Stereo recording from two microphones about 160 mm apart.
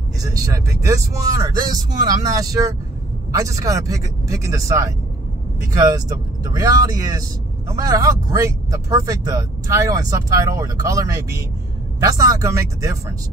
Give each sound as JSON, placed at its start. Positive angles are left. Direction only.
{"t": 0.2, "sound": "speech", "side_deg": -20}